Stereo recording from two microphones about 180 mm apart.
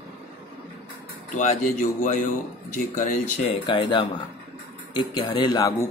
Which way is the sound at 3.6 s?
25° left (ahead or behind).